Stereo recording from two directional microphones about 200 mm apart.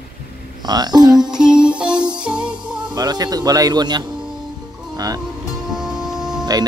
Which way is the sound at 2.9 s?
20° right (ahead or behind).